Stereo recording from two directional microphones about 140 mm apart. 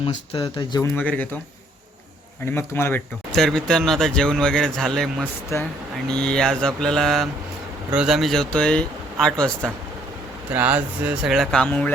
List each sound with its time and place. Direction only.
0.3 s speech: 35° left (ahead or behind)
0.9 s speech: 10° left (ahead or behind)
2.5 s speech: 15° left (ahead or behind)
3.3 s speech: 5° left (ahead or behind)
5.5 s speech: 20° left (ahead or behind)
6.1 s speech: 5° left (ahead or behind)
10.5 s speech: 10° right (ahead or behind); by 11.9 s 10° left (ahead or behind)